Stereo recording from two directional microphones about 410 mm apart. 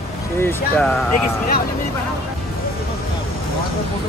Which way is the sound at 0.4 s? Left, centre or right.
Centre.